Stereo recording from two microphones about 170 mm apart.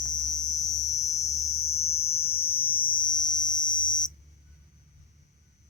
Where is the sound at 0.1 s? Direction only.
45° left (ahead or behind).